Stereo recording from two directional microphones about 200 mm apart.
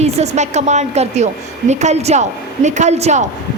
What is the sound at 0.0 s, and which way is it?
A woman's voice, 35° right (ahead or behind).